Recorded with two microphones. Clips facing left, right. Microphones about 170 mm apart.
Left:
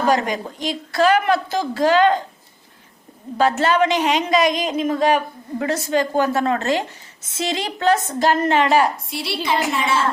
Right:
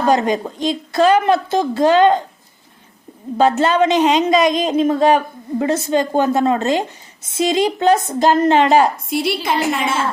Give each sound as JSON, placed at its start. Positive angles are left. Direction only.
{"t": 0.1, "sound": "a woman's voice", "side_deg": -25}
{"t": 3.6, "sound": "a woman's voice", "side_deg": -20}
{"t": 9.0, "sound": "a woman's voice", "side_deg": -50}